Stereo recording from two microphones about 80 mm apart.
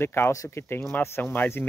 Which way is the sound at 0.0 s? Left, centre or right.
Left.